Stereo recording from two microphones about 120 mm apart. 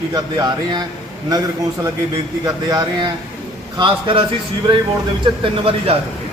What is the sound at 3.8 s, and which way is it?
Speech, 45° right (ahead or behind).